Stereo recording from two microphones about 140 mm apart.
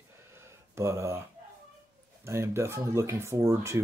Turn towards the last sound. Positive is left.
turn(degrees=-20)  # may be behind; listen again after turning